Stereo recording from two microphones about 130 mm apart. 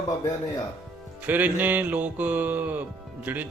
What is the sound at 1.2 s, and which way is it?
Music, 15° right (ahead or behind).